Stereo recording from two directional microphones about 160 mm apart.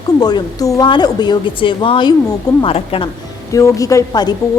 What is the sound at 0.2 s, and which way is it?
A woman's voice, 25° left (ahead or behind).